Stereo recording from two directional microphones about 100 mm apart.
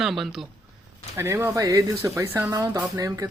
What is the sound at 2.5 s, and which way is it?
Music, 35° right (ahead or behind).